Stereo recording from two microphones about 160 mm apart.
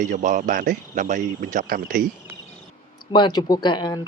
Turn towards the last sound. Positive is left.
turn(degrees=25)  # may be behind; listen again after turning